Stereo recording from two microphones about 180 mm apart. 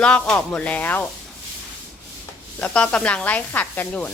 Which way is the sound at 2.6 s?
5° left (ahead or behind).